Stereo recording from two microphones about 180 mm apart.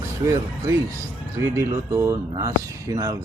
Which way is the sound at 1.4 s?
15° right (ahead or behind).